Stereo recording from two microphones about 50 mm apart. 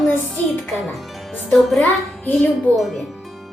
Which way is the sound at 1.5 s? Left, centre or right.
Centre.